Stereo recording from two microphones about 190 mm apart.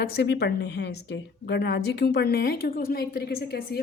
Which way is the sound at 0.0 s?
60° left (ahead or behind).